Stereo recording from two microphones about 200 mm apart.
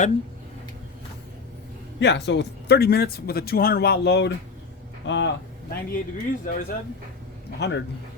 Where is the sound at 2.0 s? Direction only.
60° left (ahead or behind).